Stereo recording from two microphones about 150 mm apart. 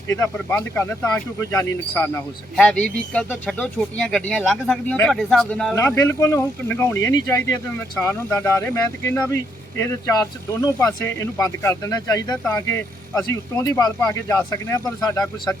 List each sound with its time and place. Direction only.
0.3 s speech: 10° left (ahead or behind)
5.7 s speech: 15° left (ahead or behind)